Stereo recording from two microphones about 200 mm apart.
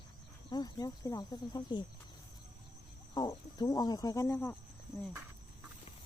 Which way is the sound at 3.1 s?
20° left (ahead or behind).